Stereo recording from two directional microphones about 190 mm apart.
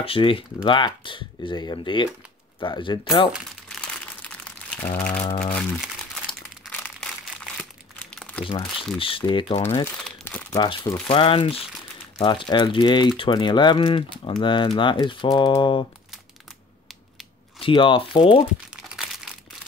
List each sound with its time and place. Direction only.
0.0 s speech: 30° left (ahead or behind)
3.3 s crumpling: 5° left (ahead or behind)
4.9 s speech: 5° left (ahead or behind)
6.6 s crumpling: 5° left (ahead or behind)
8.2 s crumpling: 10° left (ahead or behind)
8.5 s speech: 25° left (ahead or behind)
10.0 s crumpling: 10° left (ahead or behind)
10.6 s speech: 25° left (ahead or behind)
17.6 s speech: 25° left (ahead or behind)